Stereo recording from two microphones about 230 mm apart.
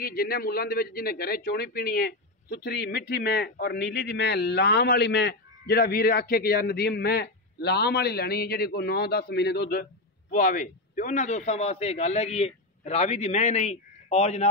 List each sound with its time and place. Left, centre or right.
0.0 s a man's voice: left